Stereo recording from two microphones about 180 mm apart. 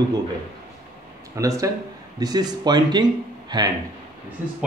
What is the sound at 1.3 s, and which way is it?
A man's voice, 20° right (ahead or behind).